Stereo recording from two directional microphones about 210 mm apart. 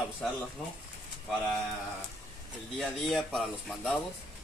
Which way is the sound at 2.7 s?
Centre (ahead or behind).